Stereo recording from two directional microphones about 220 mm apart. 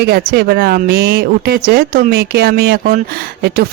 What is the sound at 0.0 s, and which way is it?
Speech, 45° right (ahead or behind).